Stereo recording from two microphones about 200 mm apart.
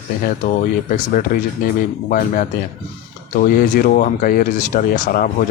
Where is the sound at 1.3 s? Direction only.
45° left (ahead or behind).